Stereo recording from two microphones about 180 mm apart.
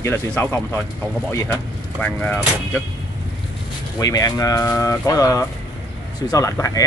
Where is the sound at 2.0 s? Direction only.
10° left (ahead or behind).